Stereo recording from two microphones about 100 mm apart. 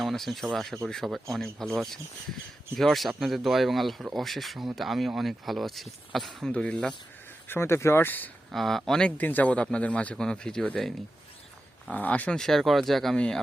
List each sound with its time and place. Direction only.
0.0 s speech: centre (ahead or behind)
6.5 s a man's voice: 10° left (ahead or behind)
7.4 s speech: 25° left (ahead or behind)
8.5 s a man's voice: 5° left (ahead or behind)
11.9 s speech: 15° left (ahead or behind)